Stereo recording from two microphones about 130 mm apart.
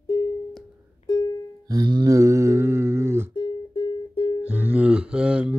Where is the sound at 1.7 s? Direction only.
30° right (ahead or behind).